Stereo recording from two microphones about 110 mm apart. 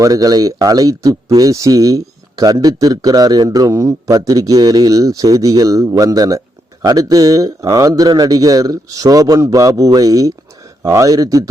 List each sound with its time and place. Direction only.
0.0 s speech: 35° right (ahead or behind)